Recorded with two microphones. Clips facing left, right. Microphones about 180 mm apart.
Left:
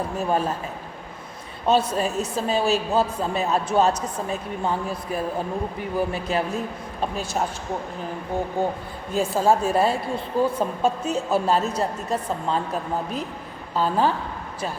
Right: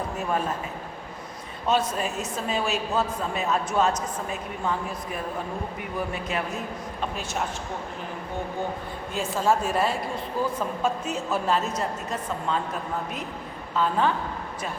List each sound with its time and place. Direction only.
0.3 s a woman's voice: 30° left (ahead or behind)
1.6 s a woman's voice: 30° left (ahead or behind)
9.1 s a woman's voice: 35° left (ahead or behind)
13.7 s a woman's voice: 35° left (ahead or behind)